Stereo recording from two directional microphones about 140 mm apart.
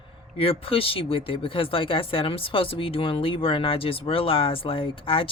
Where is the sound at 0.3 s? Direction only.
40° left (ahead or behind).